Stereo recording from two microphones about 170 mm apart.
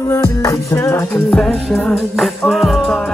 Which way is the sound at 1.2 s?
5° left (ahead or behind).